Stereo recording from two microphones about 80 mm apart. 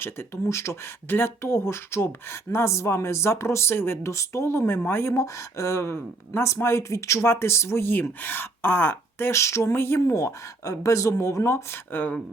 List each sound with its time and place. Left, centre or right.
0.0 s speech: left
1.0 s speech: left
5.2 s speech: left